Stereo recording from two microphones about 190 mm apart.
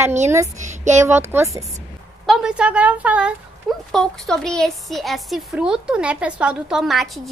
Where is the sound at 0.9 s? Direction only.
15° right (ahead or behind).